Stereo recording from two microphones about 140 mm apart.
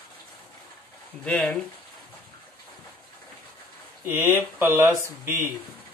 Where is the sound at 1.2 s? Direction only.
5° left (ahead or behind).